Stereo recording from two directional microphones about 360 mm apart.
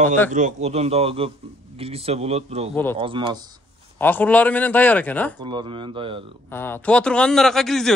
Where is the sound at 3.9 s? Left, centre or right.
Centre.